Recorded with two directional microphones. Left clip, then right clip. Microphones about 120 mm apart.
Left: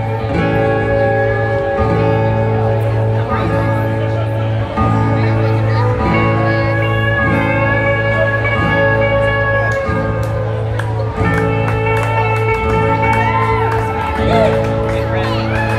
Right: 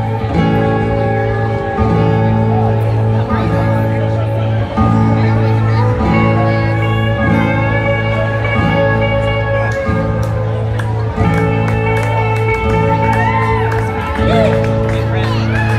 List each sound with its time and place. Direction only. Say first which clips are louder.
6.0 s music: right 1 dB; 5° right (ahead or behind)
8.6 s music: even; 5° right (ahead or behind)
14.2 s music: even; 60° left (ahead or behind)